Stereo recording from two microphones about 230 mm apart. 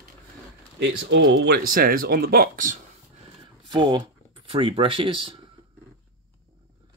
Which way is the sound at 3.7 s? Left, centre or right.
Centre.